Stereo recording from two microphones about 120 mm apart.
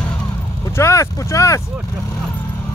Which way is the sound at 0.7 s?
25° left (ahead or behind).